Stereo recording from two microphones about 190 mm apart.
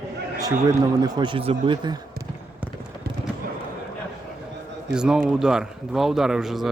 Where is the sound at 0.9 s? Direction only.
20° right (ahead or behind).